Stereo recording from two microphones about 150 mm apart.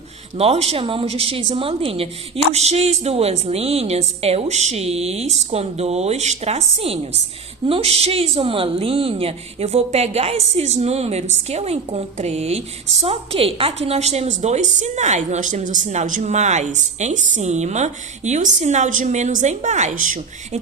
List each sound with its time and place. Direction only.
0.3 s a woman's voice: 40° right (ahead or behind); by 20.6 s 60° right (ahead or behind)